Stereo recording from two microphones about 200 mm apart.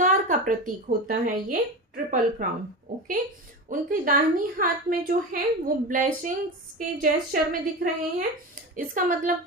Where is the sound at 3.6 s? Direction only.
45° right (ahead or behind).